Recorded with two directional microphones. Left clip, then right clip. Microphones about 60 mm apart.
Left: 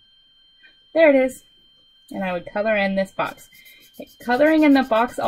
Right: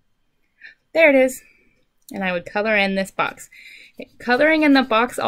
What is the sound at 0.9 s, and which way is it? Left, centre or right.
Speech, right.